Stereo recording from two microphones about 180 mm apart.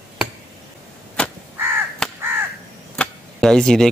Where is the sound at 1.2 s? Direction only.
5° left (ahead or behind).